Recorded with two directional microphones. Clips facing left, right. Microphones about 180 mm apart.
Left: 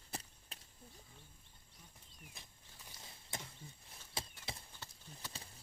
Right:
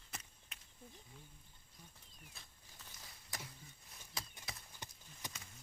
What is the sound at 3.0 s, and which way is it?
Horse, 25° left (ahead or behind).